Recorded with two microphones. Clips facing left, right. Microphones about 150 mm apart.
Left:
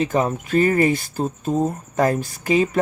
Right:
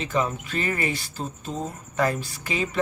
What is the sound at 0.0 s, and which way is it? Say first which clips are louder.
Speech: left 6 dB; 45° left (ahead or behind).